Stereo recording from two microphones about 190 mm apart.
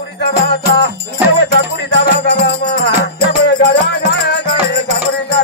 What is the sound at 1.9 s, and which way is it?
Music, 65° left (ahead or behind).